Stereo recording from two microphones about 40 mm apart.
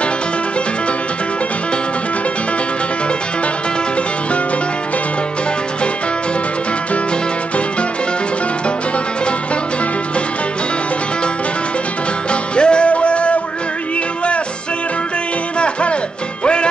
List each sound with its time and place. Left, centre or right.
12.3 s music: left
15.6 s music: left